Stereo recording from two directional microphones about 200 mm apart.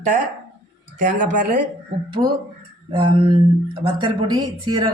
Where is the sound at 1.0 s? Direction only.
40° right (ahead or behind).